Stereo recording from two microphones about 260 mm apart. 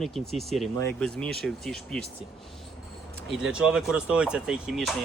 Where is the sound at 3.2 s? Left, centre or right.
Centre.